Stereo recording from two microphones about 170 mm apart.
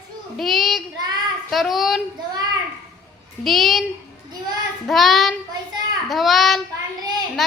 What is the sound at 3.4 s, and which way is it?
Speech, centre (ahead or behind).